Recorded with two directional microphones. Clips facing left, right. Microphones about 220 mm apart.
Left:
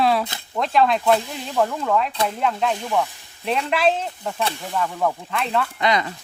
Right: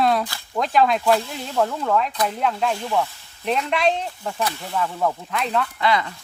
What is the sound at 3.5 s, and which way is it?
Speech, centre (ahead or behind).